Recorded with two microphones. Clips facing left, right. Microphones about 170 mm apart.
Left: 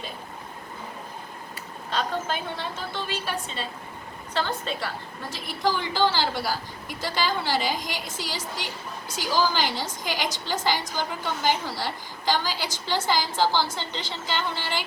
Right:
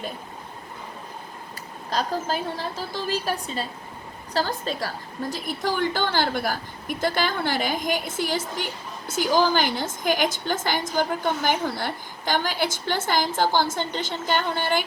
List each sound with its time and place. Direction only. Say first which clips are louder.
1.9 s a woman's voice: right 2 dB; 40° right (ahead or behind)
5.3 s a woman's voice: left 1 dB; 50° right (ahead or behind)